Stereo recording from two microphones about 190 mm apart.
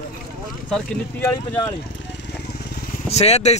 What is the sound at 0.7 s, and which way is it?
Speech, 5° left (ahead or behind).